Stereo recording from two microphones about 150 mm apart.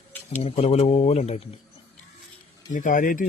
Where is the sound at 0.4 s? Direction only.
45° left (ahead or behind).